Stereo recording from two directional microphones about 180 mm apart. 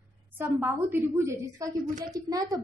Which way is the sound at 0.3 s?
10° right (ahead or behind).